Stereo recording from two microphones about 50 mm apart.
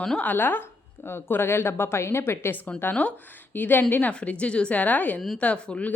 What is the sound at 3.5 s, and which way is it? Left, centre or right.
Speech, left.